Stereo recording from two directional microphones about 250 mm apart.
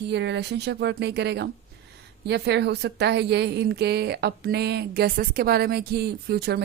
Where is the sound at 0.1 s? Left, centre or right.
Right.